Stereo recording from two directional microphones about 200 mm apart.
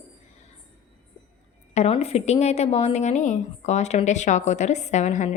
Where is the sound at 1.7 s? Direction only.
30° left (ahead or behind).